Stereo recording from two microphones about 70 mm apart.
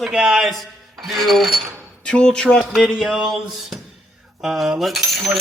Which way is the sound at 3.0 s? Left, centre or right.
Centre.